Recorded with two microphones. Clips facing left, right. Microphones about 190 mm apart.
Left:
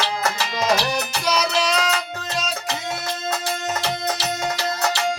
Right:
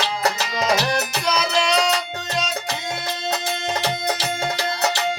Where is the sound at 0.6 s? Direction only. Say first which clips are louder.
Even; centre (ahead or behind).